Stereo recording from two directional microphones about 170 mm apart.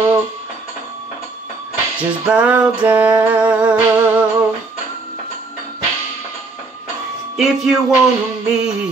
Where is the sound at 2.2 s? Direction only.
10° right (ahead or behind).